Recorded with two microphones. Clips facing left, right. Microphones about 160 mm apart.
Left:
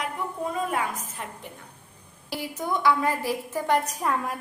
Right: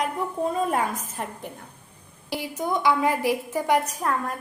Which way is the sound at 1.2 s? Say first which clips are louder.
Right 7 dB; 40° right (ahead or behind).